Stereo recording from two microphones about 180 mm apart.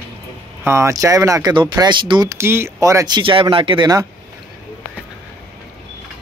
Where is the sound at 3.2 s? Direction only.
30° right (ahead or behind).